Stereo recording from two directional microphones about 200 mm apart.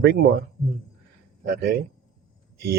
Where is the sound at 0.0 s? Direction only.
55° right (ahead or behind).